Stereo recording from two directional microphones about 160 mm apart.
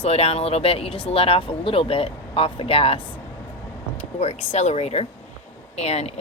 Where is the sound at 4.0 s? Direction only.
40° left (ahead or behind).